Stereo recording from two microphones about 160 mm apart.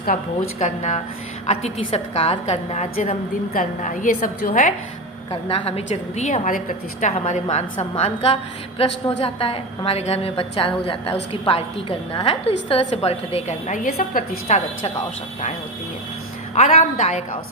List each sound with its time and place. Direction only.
0.6 s a woman's voice: 45° left (ahead or behind)
5.3 s a woman's voice: 35° left (ahead or behind); by 14.3 s 60° left (ahead or behind)
14.4 s a woman's voice: 45° left (ahead or behind)
16.6 s a woman's voice: 50° left (ahead or behind)